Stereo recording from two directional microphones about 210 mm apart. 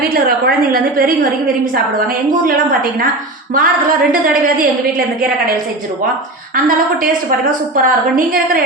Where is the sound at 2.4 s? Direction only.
40° right (ahead or behind).